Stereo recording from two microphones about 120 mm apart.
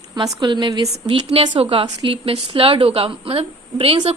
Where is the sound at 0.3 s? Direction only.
35° right (ahead or behind).